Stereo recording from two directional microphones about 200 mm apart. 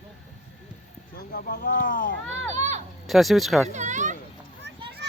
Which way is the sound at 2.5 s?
35° right (ahead or behind).